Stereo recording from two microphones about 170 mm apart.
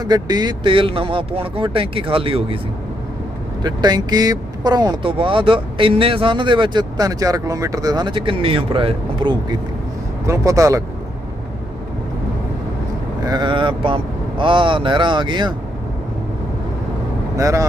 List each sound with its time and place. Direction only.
0.0 s speech: 25° right (ahead or behind)
3.6 s speech: 25° right (ahead or behind)
13.2 s speech: 25° right (ahead or behind)
17.3 s speech: 20° right (ahead or behind)